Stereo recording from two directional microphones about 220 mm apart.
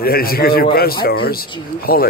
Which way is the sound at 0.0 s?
45° left (ahead or behind).